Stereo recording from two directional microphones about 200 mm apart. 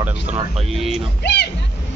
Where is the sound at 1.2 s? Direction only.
55° left (ahead or behind).